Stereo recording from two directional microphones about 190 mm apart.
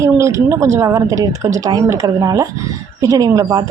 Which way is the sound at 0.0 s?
15° right (ahead or behind).